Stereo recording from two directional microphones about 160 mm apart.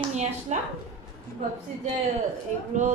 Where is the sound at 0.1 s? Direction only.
45° right (ahead or behind).